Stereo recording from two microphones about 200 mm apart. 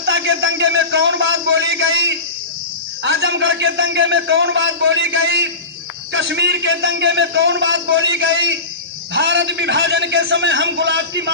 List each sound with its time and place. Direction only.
0.0 s a man's voice: 70° right (ahead or behind)
3.0 s a man's voice: 60° right (ahead or behind)